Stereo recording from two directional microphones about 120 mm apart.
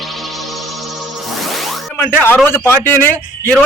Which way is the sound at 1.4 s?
Centre (ahead or behind).